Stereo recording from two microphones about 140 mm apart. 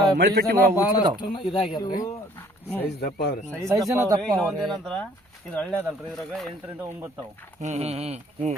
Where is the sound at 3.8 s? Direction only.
25° right (ahead or behind).